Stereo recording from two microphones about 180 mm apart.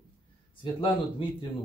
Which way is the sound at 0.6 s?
30° left (ahead or behind).